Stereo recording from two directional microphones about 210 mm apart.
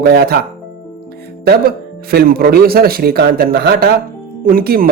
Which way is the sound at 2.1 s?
45° right (ahead or behind).